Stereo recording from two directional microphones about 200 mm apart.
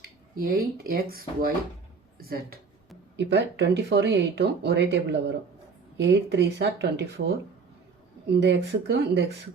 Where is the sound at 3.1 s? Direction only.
60° right (ahead or behind).